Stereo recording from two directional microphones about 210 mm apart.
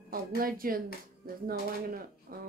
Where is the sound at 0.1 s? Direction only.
45° right (ahead or behind).